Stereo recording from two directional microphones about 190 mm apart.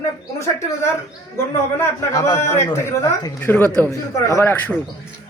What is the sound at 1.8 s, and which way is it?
A man's voice, 15° left (ahead or behind).